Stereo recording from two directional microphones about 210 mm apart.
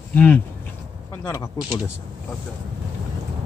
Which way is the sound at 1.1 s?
15° left (ahead or behind).